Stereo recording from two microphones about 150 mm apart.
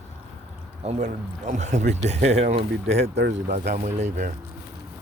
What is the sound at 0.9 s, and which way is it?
Speech, 50° right (ahead or behind).